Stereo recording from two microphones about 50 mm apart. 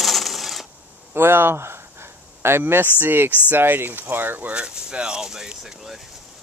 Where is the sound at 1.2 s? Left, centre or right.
Right.